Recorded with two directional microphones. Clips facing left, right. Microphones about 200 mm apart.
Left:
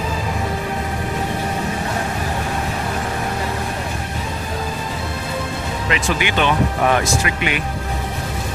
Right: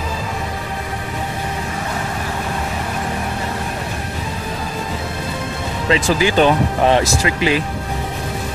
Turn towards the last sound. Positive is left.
turn(degrees=-30)  # may be behind; listen again after turning